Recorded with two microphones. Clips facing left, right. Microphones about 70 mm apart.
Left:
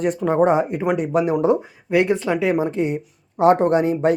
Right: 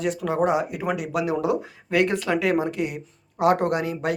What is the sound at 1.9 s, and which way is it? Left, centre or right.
Speech, left.